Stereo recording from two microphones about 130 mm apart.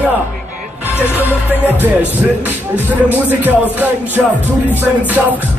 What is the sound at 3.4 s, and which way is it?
Music, 15° right (ahead or behind).